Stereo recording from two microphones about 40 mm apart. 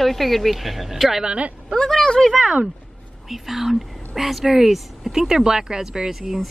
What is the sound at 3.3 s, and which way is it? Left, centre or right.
Speech, centre.